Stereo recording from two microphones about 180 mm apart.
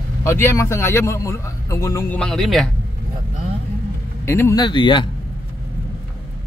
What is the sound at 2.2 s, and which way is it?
Speech, centre (ahead or behind).